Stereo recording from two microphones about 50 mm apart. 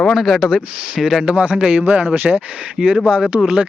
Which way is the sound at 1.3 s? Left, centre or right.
Right.